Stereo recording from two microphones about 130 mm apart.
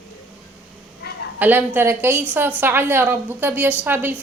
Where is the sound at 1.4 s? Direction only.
15° right (ahead or behind).